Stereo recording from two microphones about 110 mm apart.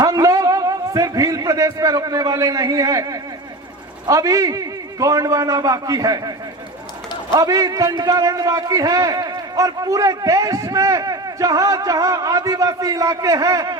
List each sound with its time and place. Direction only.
0.0 s a man's voice: 35° right (ahead or behind)
7.3 s a man's voice: 30° right (ahead or behind)